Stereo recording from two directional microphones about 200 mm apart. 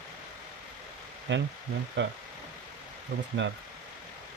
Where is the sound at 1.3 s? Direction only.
65° right (ahead or behind).